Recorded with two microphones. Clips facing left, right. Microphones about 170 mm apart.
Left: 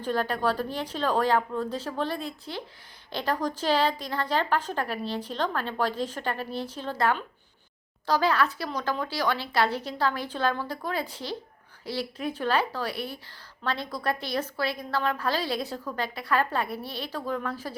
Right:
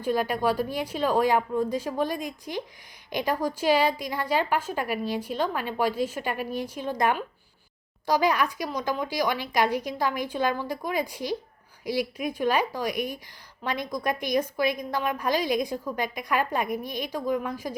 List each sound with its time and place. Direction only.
0.0 s a woman's voice: 10° right (ahead or behind)